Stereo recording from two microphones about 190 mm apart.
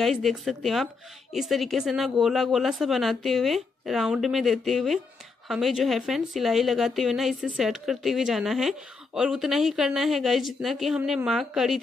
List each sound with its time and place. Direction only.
0.0 s a woman's voice: centre (ahead or behind)